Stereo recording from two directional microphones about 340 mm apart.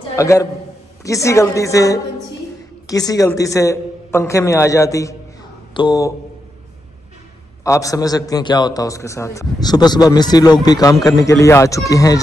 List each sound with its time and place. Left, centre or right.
0.1 s a man's voice: centre
7.6 s a man's voice: centre